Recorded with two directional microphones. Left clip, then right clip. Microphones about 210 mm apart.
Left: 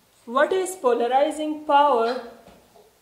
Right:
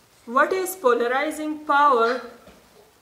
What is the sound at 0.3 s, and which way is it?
A woman's voice, 10° right (ahead or behind).